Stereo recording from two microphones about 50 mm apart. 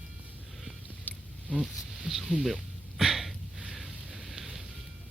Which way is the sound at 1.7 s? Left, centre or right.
Centre.